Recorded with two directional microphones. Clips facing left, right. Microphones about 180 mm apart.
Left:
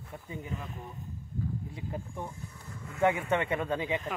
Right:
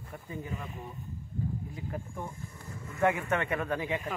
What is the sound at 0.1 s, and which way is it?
Speech, 20° left (ahead or behind).